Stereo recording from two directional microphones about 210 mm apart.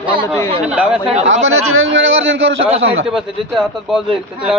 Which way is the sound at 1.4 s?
70° right (ahead or behind).